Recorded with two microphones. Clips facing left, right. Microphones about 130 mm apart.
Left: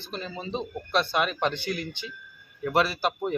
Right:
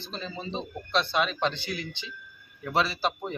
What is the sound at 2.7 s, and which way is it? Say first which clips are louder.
Speech: left 2 dB; 10° left (ahead or behind).